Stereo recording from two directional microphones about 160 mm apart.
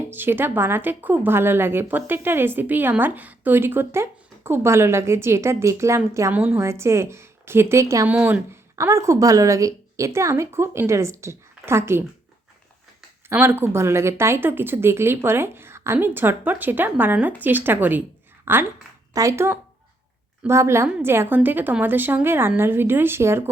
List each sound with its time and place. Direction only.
0.1 s a woman's voice: 15° right (ahead or behind)
13.3 s a woman's voice: 15° right (ahead or behind)